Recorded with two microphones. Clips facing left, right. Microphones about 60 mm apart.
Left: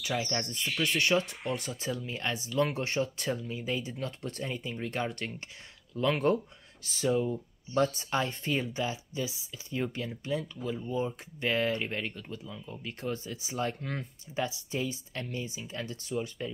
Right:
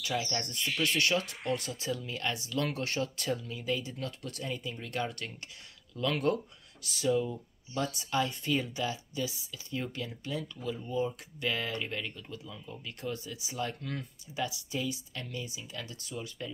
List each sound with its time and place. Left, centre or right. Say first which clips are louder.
0.0 s speech: left 1 dB; left
7.7 s speech: left 4 dB; left
12.5 s speech: left 2 dB; centre
12.8 s speech: left 3 dB; left